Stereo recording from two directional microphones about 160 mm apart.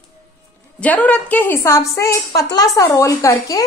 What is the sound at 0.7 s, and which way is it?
A woman's voice, 10° left (ahead or behind).